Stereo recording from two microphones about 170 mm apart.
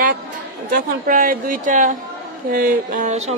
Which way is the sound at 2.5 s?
55° right (ahead or behind).